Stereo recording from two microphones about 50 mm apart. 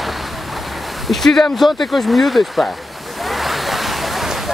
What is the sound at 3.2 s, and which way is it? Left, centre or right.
Waves, centre.